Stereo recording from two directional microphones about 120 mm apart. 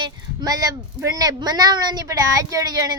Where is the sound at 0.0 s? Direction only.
35° right (ahead or behind).